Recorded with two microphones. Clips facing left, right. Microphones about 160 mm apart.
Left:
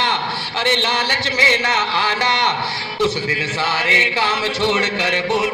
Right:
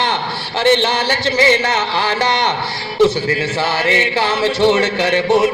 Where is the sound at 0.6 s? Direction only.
40° right (ahead or behind).